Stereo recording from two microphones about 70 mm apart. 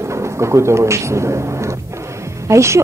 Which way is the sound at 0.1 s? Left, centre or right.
Right.